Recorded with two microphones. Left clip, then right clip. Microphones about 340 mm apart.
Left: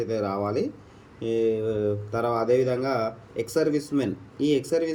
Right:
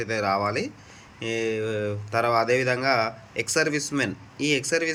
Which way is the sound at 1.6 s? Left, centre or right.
Centre.